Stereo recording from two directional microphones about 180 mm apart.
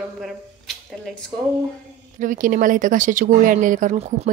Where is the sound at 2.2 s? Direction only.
50° right (ahead or behind).